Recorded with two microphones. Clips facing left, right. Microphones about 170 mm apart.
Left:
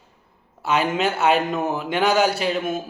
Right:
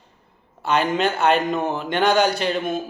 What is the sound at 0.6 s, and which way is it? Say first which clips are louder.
Speech: right 1 dB; 5° left (ahead or behind).